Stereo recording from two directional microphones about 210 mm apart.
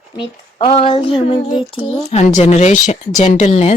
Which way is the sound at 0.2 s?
25° left (ahead or behind).